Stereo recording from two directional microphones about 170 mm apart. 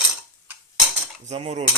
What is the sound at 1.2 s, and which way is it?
Speech, 40° right (ahead or behind).